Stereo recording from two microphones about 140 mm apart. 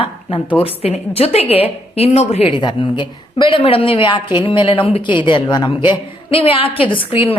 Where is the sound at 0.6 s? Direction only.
45° left (ahead or behind).